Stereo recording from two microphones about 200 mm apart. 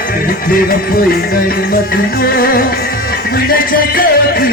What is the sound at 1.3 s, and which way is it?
Music, 45° left (ahead or behind).